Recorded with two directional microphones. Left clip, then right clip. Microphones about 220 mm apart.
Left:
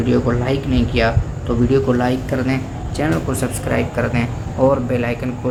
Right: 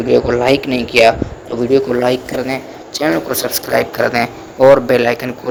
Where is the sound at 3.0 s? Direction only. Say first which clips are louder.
Right 5 dB; 35° right (ahead or behind).